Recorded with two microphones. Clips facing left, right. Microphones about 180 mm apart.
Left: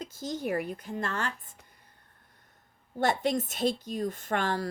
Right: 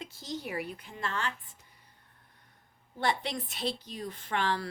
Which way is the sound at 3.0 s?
45° left (ahead or behind).